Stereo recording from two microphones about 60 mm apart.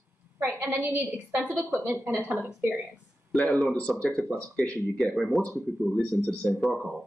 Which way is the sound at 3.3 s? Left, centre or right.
Centre.